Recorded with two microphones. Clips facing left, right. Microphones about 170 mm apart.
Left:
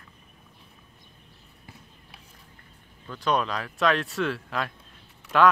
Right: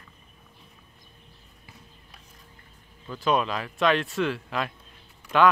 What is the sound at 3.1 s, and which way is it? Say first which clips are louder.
Speech: right 1 dB; 5° right (ahead or behind).